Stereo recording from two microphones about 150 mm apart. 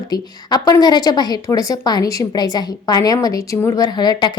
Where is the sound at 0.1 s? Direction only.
25° left (ahead or behind).